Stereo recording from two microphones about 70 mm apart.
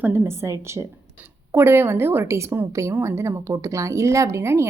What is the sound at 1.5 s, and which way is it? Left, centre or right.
A woman's voice, right.